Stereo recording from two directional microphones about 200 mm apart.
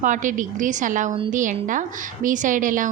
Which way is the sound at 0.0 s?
40° right (ahead or behind).